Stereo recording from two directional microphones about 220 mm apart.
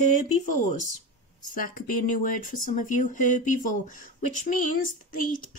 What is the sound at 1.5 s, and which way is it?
Speech, 40° left (ahead or behind).